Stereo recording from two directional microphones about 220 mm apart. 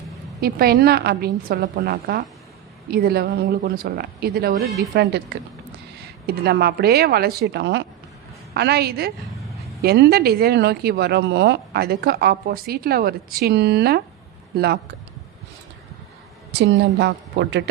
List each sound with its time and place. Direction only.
0.4 s speech: 45° right (ahead or behind)
16.5 s speech: 50° right (ahead or behind)